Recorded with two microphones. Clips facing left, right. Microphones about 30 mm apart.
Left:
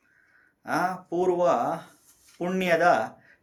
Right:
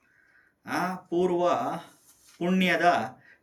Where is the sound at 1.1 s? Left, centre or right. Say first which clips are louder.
Left 1 dB; right.